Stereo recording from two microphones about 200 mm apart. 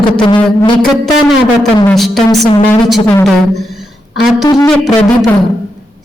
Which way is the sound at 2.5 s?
25° left (ahead or behind).